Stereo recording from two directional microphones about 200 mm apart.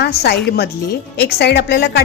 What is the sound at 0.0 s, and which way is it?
A woman's voice, 55° left (ahead or behind).